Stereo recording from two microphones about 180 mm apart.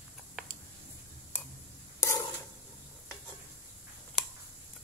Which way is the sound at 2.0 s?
15° left (ahead or behind).